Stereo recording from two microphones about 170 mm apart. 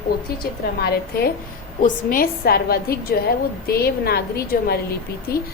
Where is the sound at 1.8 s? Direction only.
55° left (ahead or behind).